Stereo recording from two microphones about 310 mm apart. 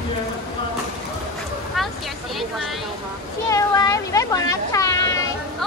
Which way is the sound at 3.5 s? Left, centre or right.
Centre.